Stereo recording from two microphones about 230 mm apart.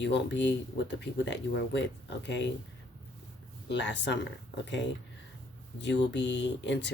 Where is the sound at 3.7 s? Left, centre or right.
Left.